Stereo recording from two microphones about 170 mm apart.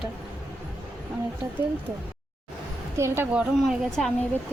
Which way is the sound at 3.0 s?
15° right (ahead or behind).